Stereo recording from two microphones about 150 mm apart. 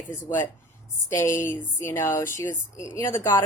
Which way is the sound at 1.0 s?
20° left (ahead or behind).